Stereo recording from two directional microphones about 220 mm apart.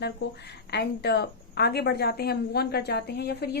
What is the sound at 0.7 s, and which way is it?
A woman's voice, 50° left (ahead or behind).